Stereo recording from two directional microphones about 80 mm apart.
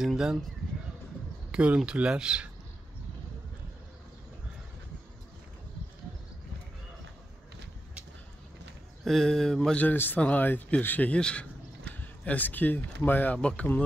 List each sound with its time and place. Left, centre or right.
0.0 s speech: centre
1.5 s speech: centre
9.0 s speech: centre
9.8 s speech: left